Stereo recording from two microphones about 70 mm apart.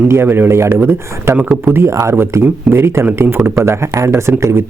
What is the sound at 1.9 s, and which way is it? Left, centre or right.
Speech, right.